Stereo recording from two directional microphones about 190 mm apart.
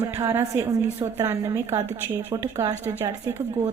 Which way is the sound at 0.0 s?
15° right (ahead or behind).